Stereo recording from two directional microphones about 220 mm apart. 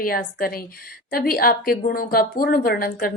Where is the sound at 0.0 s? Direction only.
40° left (ahead or behind).